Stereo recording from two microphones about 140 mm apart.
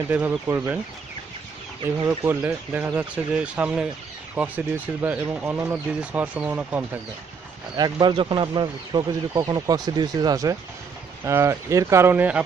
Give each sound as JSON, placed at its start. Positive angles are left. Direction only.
{"t": 0.1, "sound": "speech", "side_deg": -10}
{"t": 2.4, "sound": "speech", "side_deg": -10}
{"t": 7.7, "sound": "speech", "side_deg": -30}